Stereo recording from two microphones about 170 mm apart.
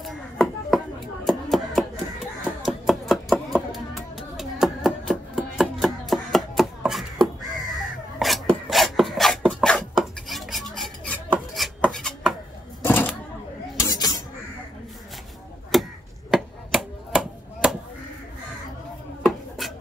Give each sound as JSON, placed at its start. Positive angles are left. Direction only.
{"t": 0.0, "sound": "chopping", "side_deg": 0}
{"t": 8.2, "sound": "filing", "side_deg": 0}
{"t": 12.8, "sound": "typewriter", "side_deg": 10}
{"t": 13.7, "sound": "a sound", "side_deg": 20}
{"t": 15.7, "sound": "chop", "side_deg": 0}
{"t": 19.2, "sound": "a sound", "side_deg": 0}